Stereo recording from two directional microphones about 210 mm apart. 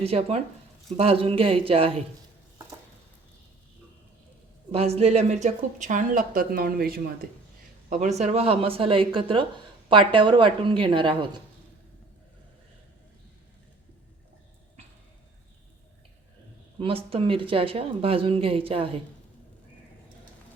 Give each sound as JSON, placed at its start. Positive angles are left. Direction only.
{"t": 0.0, "sound": "speech", "side_deg": -30}
{"t": 4.7, "sound": "speech", "side_deg": -30}
{"t": 7.9, "sound": "speech", "side_deg": -35}
{"t": 16.8, "sound": "speech", "side_deg": -25}